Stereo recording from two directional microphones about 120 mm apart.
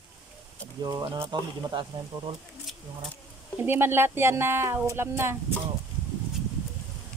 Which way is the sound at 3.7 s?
20° right (ahead or behind).